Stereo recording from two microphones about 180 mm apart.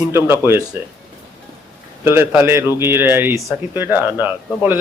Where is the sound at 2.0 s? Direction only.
10° right (ahead or behind).